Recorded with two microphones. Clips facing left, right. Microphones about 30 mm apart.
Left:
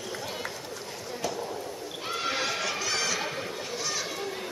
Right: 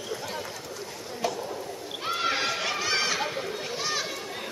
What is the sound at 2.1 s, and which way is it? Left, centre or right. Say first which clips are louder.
Run: right 3 dB; centre.